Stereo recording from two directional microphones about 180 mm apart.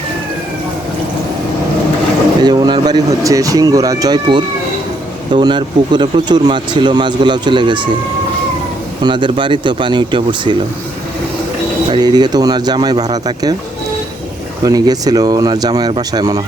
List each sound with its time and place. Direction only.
2.4 s speech: 25° right (ahead or behind)
9.0 s speech: 25° right (ahead or behind)
11.9 s speech: 25° right (ahead or behind)
14.6 s speech: 20° right (ahead or behind)